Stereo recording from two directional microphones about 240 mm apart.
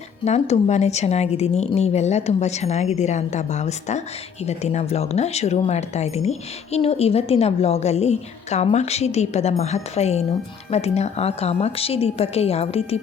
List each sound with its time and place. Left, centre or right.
0.3 s speech: left